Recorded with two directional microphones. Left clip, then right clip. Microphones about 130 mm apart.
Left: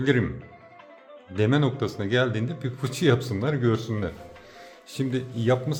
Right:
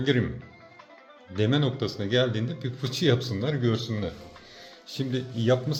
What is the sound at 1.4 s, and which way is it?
Speech, 40° left (ahead or behind).